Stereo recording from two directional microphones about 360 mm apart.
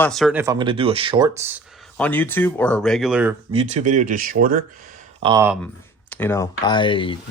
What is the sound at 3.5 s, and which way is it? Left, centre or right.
Speech, centre.